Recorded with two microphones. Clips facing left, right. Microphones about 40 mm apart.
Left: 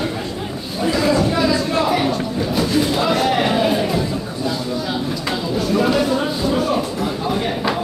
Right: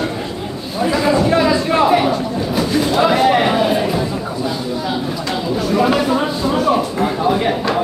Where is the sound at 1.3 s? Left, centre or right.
Right.